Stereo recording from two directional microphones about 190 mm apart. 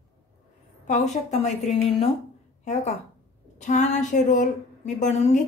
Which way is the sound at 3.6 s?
40° left (ahead or behind).